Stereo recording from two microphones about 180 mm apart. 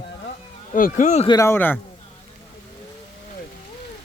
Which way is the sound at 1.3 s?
15° left (ahead or behind).